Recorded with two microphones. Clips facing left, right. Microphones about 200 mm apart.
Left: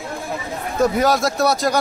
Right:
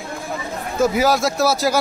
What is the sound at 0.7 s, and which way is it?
A man's voice, centre (ahead or behind).